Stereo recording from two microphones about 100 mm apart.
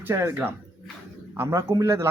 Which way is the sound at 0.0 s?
25° right (ahead or behind).